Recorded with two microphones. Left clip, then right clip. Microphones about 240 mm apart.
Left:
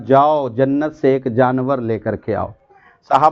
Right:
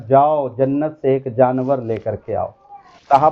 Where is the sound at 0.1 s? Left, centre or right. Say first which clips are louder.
Left 1 dB; left.